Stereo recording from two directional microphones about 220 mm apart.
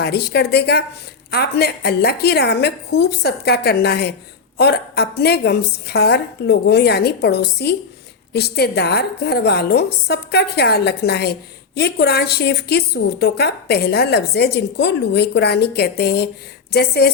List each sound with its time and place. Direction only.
0.0 s a woman's voice: 45° left (ahead or behind)